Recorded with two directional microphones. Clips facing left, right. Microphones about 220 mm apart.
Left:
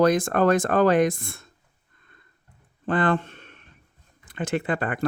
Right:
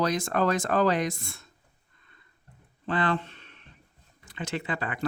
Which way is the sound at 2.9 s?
50° left (ahead or behind).